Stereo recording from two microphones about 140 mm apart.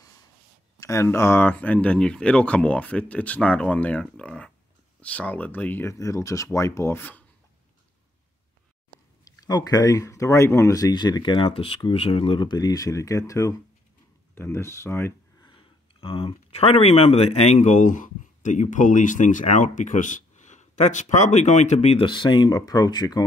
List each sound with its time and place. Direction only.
0.7 s speech: 20° left (ahead or behind)
9.2 s speech: 30° left (ahead or behind)
15.4 s speech: 35° left (ahead or behind)
22.0 s speech: 35° left (ahead or behind)